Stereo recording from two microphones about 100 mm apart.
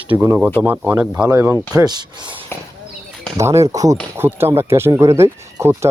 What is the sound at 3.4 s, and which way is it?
Speech, 30° right (ahead or behind).